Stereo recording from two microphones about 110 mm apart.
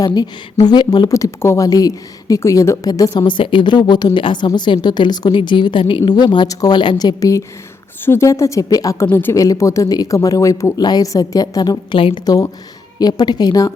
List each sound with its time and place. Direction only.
0.0 s a woman's voice: 40° left (ahead or behind)
3.2 s a woman's voice: 50° left (ahead or behind); by 9.0 s 30° left (ahead or behind)
9.0 s a woman's voice: 20° left (ahead or behind); by 12.2 s 50° left (ahead or behind)
12.2 s a woman's voice: 35° left (ahead or behind)